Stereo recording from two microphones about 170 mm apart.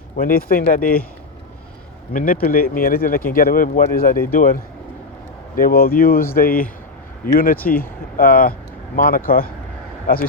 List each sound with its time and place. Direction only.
0.2 s speech: 60° left (ahead or behind)
2.1 s speech: 55° left (ahead or behind)